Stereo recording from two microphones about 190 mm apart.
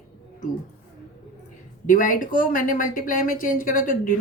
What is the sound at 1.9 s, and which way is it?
Speech, 45° left (ahead or behind).